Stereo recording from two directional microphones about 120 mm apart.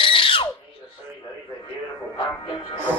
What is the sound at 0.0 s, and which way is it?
Squeal, 45° left (ahead or behind).